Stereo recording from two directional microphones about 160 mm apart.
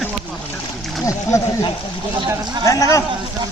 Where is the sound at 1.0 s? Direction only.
20° left (ahead or behind).